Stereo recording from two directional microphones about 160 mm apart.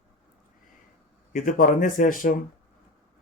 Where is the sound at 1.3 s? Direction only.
60° left (ahead or behind).